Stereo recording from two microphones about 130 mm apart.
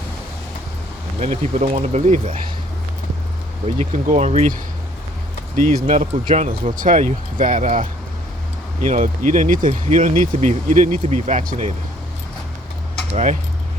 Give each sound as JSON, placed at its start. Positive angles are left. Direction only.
{"t": 1.2, "sound": "speech", "side_deg": -65}
{"t": 3.8, "sound": "speech", "side_deg": -65}
{"t": 5.5, "sound": "speech", "side_deg": -65}
{"t": 6.3, "sound": "speech", "side_deg": -75}